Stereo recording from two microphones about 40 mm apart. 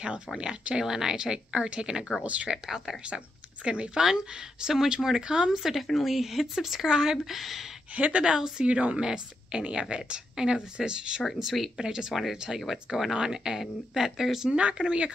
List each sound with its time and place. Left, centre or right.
0.4 s a woman's voice: right
2.2 s speech: right
2.5 s speech: centre
3.6 s a woman's voice: right
4.0 s speech: centre
7.3 s speech: centre
7.9 s speech: right
8.2 s a woman's voice: centre
11.5 s speech: centre
11.8 s speech: centre
12.1 s speech: centre
13.1 s speech: centre
14.5 s a woman's voice: right